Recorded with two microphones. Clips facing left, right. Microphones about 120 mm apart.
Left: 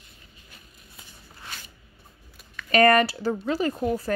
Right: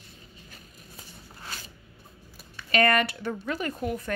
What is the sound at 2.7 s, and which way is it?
Speech, 40° left (ahead or behind).